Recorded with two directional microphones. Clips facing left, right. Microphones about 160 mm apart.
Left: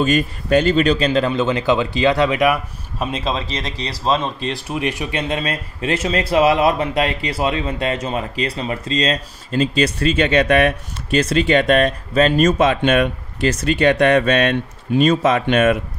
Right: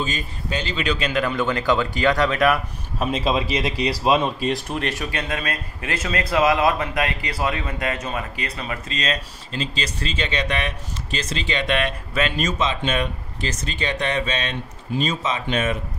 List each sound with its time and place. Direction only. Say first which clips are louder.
0.0 s a man's voice: left 10 dB; 60° left (ahead or behind); by 2.6 s 15° left (ahead or behind)
3.0 s speech: right 1 dB; 5° right (ahead or behind)
4.5 s a man's voice: left 1 dB; 5° left (ahead or behind); by 9.2 s 30° left (ahead or behind)
9.5 s speech: left 11 dB; 50° left (ahead or behind)